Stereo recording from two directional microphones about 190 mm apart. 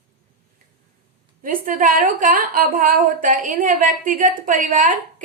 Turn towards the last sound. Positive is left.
turn(degrees=-45)  # may be behind; listen again after turning